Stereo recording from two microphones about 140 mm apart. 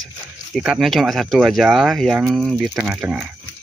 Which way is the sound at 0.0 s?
Centre (ahead or behind).